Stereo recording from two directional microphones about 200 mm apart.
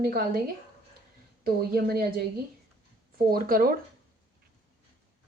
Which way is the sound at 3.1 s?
45° right (ahead or behind).